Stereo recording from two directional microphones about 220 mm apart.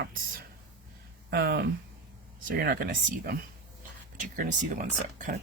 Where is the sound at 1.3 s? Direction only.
45° right (ahead or behind).